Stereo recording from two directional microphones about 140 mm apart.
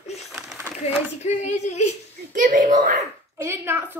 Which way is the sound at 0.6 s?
15° right (ahead or behind).